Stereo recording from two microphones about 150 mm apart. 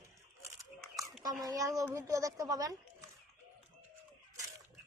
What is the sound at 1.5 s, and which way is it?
Speech, 25° right (ahead or behind).